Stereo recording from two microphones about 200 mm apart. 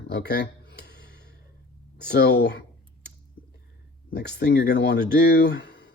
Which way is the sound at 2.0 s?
55° left (ahead or behind).